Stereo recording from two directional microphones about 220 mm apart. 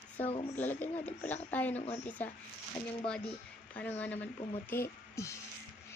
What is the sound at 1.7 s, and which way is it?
Speech, 30° left (ahead or behind).